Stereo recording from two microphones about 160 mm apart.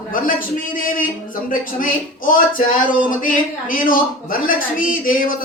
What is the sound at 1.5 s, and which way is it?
Speech, 60° left (ahead or behind).